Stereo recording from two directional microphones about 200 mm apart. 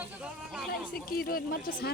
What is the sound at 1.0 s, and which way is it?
Speech, 45° left (ahead or behind).